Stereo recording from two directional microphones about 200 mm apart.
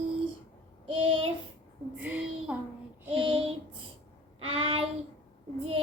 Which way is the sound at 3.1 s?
25° right (ahead or behind).